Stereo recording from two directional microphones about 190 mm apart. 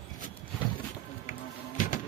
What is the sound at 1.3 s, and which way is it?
Music, 45° left (ahead or behind).